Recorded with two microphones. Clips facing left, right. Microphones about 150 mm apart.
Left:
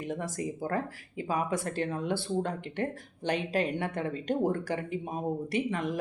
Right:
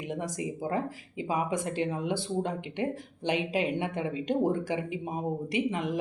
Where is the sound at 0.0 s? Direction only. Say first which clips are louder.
Even; 15° right (ahead or behind).